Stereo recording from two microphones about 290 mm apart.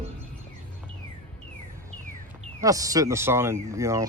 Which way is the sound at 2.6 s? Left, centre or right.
Centre.